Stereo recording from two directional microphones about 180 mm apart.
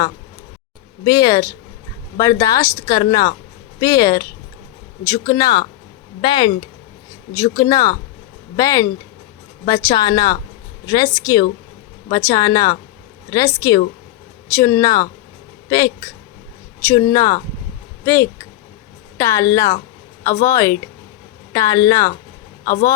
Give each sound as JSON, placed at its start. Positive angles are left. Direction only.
{"t": 1.0, "sound": "speech", "side_deg": 20}
{"t": 16.9, "sound": "speech", "side_deg": 15}